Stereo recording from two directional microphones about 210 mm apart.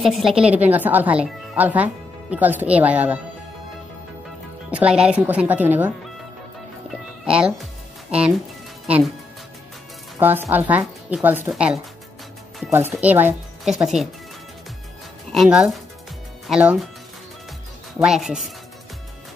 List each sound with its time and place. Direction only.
0.0 s speech: centre (ahead or behind)
4.6 s speech: 5° right (ahead or behind)
10.1 s speech: 10° right (ahead or behind)
15.3 s speech: centre (ahead or behind)
17.9 s speech: centre (ahead or behind)